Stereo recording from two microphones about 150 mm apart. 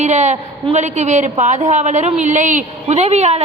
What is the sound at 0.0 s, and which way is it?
A woman's voice, 50° right (ahead or behind).